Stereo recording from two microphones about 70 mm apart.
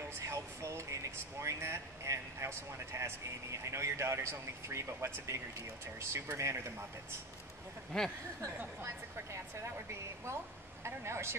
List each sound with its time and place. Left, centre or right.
0.3 s a sound: right
1.4 s speech: right
7.9 s speech: centre
8.8 s speech: right
10.8 s speech: right